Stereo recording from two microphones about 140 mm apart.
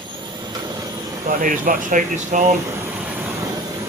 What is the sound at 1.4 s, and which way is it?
Speech, 75° right (ahead or behind).